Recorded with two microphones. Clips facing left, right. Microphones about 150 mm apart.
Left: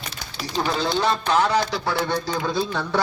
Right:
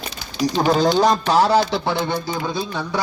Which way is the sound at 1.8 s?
20° right (ahead or behind).